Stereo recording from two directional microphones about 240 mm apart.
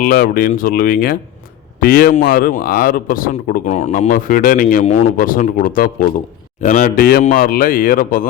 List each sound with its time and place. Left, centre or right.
0.0 s a man's voice: left